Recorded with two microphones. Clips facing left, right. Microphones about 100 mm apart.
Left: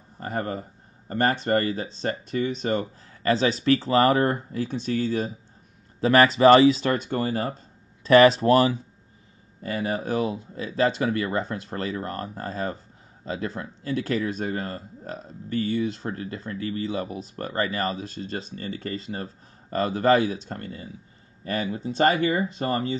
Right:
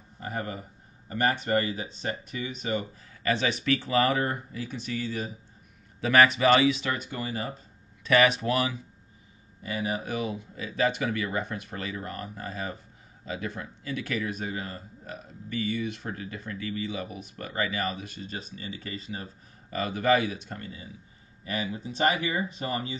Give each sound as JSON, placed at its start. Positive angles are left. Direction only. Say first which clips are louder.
{"t": 0.2, "sound": "speech", "louder": "left 5 dB", "side_deg": 40}
{"t": 6.9, "sound": "speech", "louder": "left 7 dB", "side_deg": 45}
{"t": 14.4, "sound": "speech", "louder": "left 5 dB", "side_deg": 45}
{"t": 18.3, "sound": "speech", "louder": "left 6 dB", "side_deg": 50}
{"t": 19.7, "sound": "speech", "louder": "left 4 dB", "side_deg": 35}
{"t": 20.4, "sound": "speech", "louder": "left 4 dB", "side_deg": 45}